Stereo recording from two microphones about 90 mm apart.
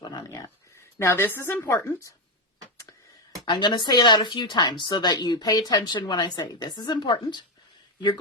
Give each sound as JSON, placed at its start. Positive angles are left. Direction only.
{"t": 0.0, "sound": "a sound", "side_deg": 50}
{"t": 0.9, "sound": "a woman's voice", "side_deg": 25}
{"t": 3.5, "sound": "speech", "side_deg": 55}